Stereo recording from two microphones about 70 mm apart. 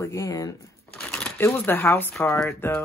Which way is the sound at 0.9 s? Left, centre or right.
Centre.